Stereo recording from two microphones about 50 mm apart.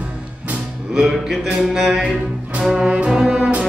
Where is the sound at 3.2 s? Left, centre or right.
Centre.